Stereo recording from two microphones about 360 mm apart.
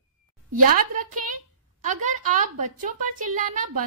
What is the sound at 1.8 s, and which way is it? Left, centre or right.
Speech, right.